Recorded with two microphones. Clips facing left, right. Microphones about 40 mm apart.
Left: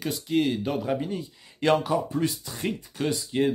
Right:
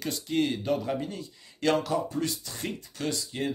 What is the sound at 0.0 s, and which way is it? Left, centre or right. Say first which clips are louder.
A man's voice: left 3 dB; centre.